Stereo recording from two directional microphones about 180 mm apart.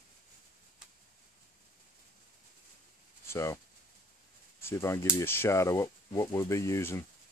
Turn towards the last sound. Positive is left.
turn(degrees=15)  # may be behind; listen again after turning